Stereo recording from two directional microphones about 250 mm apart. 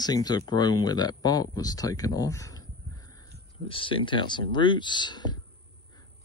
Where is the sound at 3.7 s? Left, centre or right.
Left.